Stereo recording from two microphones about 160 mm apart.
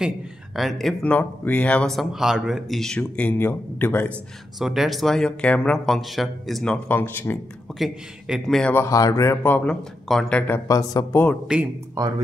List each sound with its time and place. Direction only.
0.6 s speech: centre (ahead or behind)
4.6 s speech: centre (ahead or behind)
7.8 s speech: centre (ahead or behind)
8.7 s speech: 20° left (ahead or behind)
11.5 s speech: 5° right (ahead or behind)